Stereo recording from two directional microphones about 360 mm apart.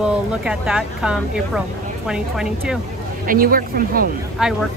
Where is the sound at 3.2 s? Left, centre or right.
Right.